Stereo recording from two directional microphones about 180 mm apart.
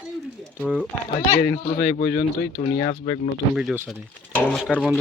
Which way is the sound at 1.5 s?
65° left (ahead or behind).